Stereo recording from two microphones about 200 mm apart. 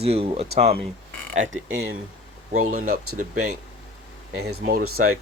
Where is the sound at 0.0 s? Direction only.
30° right (ahead or behind).